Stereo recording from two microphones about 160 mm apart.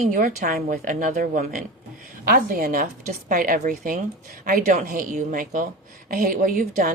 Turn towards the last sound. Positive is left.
turn(degrees=-60)  # may be behind; listen again after turning